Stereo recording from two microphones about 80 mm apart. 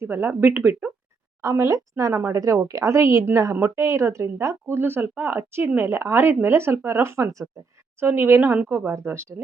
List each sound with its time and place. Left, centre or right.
0.0 s speech: right
1.4 s a woman's voice: right